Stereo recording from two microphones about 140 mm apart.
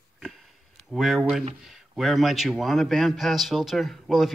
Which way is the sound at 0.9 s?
Centre (ahead or behind).